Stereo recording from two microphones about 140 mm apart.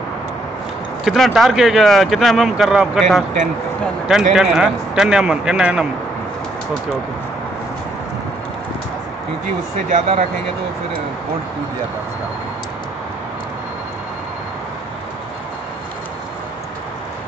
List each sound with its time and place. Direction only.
1.0 s speech: centre (ahead or behind)
9.8 s speech: 70° right (ahead or behind)